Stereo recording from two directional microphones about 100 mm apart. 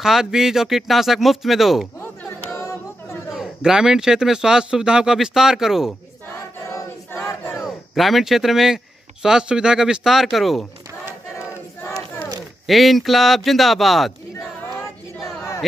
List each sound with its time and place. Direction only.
0.0 s a man's voice: 5° right (ahead or behind)
3.3 s a man's voice: 5° right (ahead or behind)
6.7 s choir: 35° left (ahead or behind)
7.5 s speech: centre (ahead or behind)
11.3 s crowd: 25° left (ahead or behind)
12.6 s a man's voice: centre (ahead or behind)